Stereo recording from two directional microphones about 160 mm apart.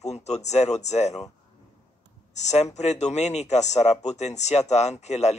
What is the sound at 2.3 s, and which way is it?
Speech, 45° left (ahead or behind).